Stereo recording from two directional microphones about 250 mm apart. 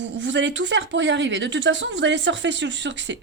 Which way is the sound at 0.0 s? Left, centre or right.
Right.